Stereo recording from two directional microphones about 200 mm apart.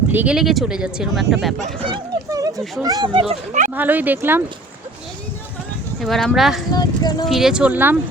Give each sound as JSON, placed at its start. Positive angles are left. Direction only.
{"t": 0.1, "sound": "speech", "side_deg": -5}
{"t": 1.6, "sound": "a sound", "side_deg": -25}
{"t": 2.8, "sound": "speech", "side_deg": -20}
{"t": 3.8, "sound": "speech", "side_deg": -10}
{"t": 6.0, "sound": "speech", "side_deg": 0}
{"t": 6.7, "sound": "speech", "side_deg": 20}
{"t": 7.3, "sound": "speech", "side_deg": 0}